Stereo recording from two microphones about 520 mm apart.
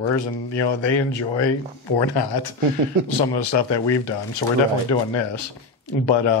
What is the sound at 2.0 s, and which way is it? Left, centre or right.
Speech, left.